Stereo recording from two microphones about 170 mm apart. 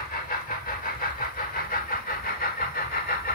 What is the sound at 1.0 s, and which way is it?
Vehicle, 55° left (ahead or behind).